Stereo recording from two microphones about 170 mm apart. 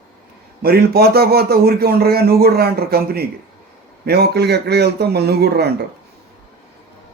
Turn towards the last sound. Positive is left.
turn(degrees=-70)  # may be behind; listen again after turning